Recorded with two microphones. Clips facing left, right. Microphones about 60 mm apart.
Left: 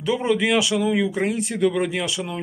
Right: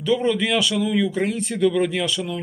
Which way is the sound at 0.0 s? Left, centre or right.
Centre.